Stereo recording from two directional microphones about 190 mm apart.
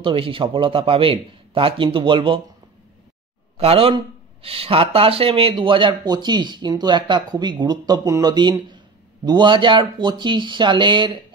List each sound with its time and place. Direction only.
0.0 s speech: 25° right (ahead or behind)
3.5 s speech: 30° right (ahead or behind)